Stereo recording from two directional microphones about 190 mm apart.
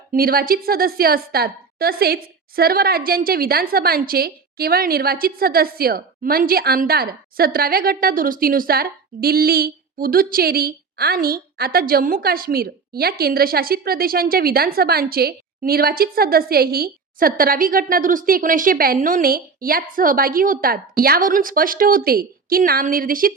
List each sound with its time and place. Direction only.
0.1 s a woman's voice: 50° right (ahead or behind)